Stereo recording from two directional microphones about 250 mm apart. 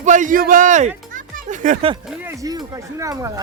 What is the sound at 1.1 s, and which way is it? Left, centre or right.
Music, right.